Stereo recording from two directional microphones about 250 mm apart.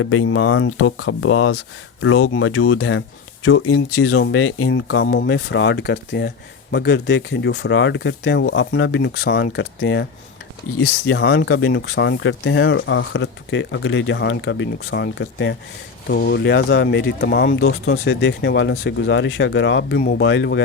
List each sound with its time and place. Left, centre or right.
0.0 s speech: left